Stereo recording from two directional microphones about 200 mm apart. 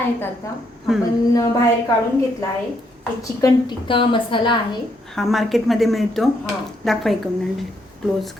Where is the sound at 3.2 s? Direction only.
15° left (ahead or behind).